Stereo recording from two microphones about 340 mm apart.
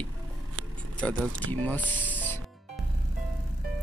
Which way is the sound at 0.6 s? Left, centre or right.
Right.